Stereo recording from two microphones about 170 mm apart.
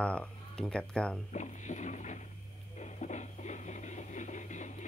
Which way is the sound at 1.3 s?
45° left (ahead or behind).